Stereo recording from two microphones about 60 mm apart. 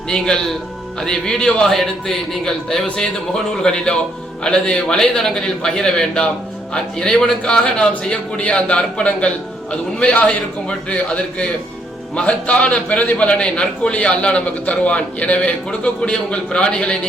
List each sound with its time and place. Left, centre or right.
0.1 s a man's voice: centre